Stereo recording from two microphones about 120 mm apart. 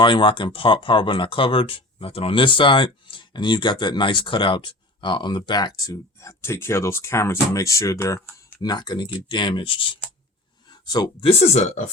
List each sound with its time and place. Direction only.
0.0 s speech: 45° left (ahead or behind); by 8.2 s 25° left (ahead or behind)
8.6 s speech: 35° left (ahead or behind)
11.3 s speech: 60° left (ahead or behind)